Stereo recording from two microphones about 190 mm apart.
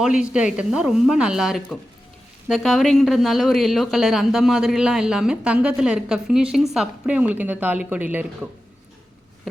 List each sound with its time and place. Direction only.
0.0 s a woman's voice: 5° right (ahead or behind)